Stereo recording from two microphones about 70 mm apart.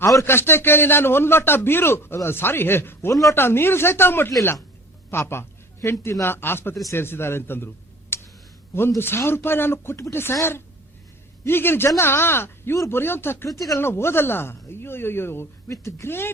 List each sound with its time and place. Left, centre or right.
0.3 s a man's voice: left
3.1 s speech: left
3.3 s a man's voice: left
8.1 s a sound: left
9.0 s a man's voice: left
11.4 s a man's voice: left
15.7 s speech: left
16.0 s a man's voice: left